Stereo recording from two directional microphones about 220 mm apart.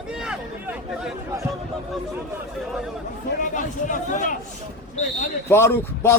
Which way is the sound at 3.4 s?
35° left (ahead or behind).